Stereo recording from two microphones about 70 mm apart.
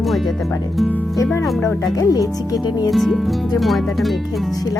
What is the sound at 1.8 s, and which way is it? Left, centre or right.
Speech, left.